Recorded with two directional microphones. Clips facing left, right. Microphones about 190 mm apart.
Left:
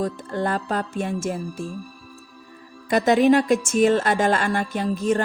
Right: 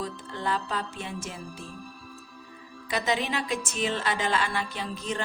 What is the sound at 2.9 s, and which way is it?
Speech, 50° left (ahead or behind).